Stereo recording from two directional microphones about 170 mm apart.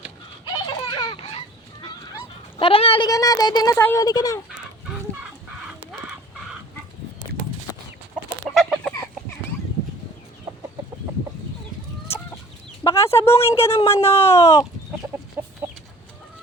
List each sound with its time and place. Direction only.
0.4 s a sound: 25° left (ahead or behind)
2.6 s speech: 30° left (ahead or behind)
3.1 s speech: 20° left (ahead or behind)
8.5 s chicken: centre (ahead or behind)
12.8 s speech: 15° left (ahead or behind)
15.4 s chicken: 10° right (ahead or behind)